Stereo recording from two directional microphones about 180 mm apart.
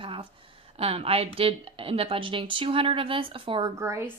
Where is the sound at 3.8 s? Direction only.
15° right (ahead or behind).